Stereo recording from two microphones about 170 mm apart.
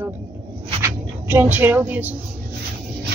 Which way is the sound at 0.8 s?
15° right (ahead or behind).